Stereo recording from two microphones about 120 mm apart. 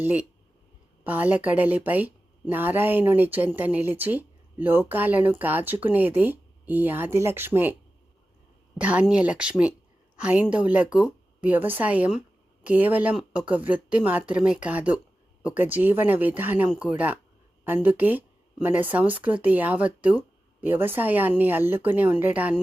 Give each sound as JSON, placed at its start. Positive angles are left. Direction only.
{"t": 0.0, "sound": "a woman's voice", "side_deg": -10}
{"t": 8.8, "sound": "a woman's voice", "side_deg": -10}